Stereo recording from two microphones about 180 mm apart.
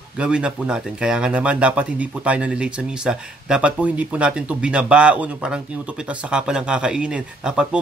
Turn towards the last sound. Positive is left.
turn(degrees=-5)  # may be behind; listen again after turning